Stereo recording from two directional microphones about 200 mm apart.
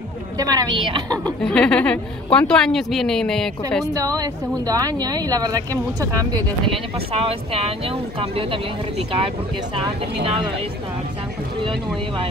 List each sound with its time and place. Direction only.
0.4 s speech: 20° right (ahead or behind)
1.2 s speech: 5° left (ahead or behind)
3.9 s speech: 20° right (ahead or behind)
7.1 s speech: 30° right (ahead or behind)